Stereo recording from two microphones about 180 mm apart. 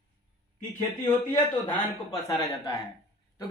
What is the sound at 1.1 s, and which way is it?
Speech, 25° left (ahead or behind).